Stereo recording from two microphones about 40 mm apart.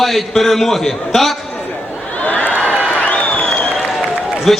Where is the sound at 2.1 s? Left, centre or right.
Left.